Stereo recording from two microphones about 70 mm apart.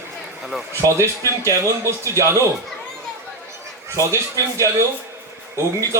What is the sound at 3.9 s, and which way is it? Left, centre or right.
Speech, right.